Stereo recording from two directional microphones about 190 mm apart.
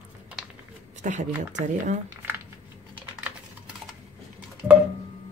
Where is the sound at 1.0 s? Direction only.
40° right (ahead or behind).